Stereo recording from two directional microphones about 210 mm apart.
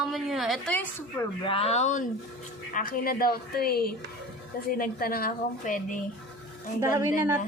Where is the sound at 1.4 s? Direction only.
25° left (ahead or behind); by 5.7 s 45° left (ahead or behind).